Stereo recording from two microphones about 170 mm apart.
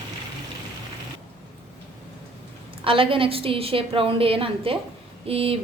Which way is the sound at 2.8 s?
30° right (ahead or behind).